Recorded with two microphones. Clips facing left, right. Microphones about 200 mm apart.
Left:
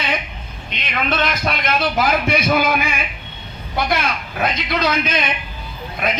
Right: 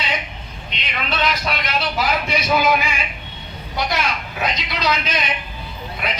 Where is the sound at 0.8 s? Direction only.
50° left (ahead or behind).